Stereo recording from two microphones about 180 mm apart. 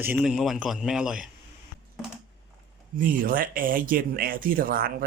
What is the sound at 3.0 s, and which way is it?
Speech, 50° right (ahead or behind).